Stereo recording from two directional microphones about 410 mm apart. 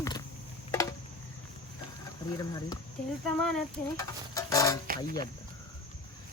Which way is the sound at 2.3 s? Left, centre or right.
Centre.